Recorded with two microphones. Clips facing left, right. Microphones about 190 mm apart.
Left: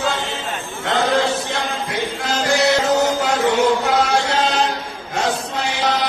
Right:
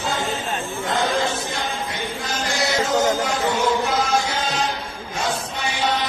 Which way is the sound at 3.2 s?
70° left (ahead or behind).